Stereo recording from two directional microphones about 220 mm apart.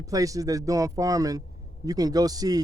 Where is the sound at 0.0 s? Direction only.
15° right (ahead or behind).